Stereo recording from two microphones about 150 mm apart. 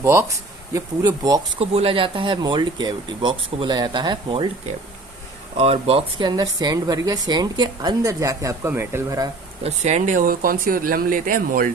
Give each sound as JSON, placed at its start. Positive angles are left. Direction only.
{"t": 0.0, "sound": "speech", "side_deg": -20}
{"t": 1.5, "sound": "speech", "side_deg": -40}
{"t": 9.6, "sound": "speech", "side_deg": -50}